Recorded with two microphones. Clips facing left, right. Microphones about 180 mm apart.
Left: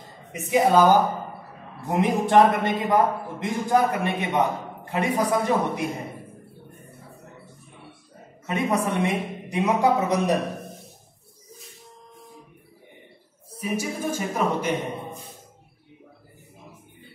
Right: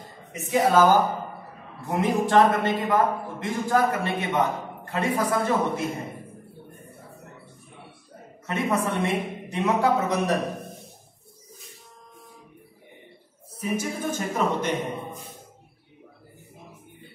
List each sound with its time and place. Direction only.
0.3 s a man's voice: 15° left (ahead or behind)
8.5 s a man's voice: 15° left (ahead or behind)
13.6 s a man's voice: 10° left (ahead or behind)